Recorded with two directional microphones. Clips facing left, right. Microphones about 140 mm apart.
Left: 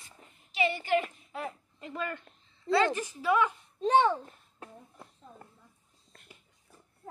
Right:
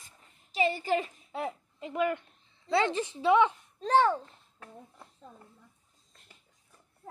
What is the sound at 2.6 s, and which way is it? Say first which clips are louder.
Speech: left 1 dB; 20° right (ahead or behind).